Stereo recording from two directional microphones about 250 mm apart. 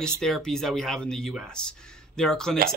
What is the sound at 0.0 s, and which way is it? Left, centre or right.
Speech, centre.